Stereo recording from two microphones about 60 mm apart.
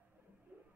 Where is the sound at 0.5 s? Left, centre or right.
Right.